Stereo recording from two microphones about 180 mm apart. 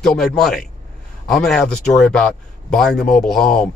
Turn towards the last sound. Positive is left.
turn(degrees=0)  # may be behind; listen again after turning